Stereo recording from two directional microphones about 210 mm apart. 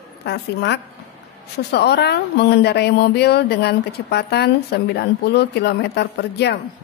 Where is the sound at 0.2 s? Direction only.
55° left (ahead or behind).